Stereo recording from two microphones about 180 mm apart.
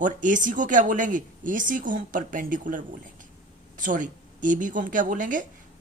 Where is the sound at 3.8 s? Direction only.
45° right (ahead or behind).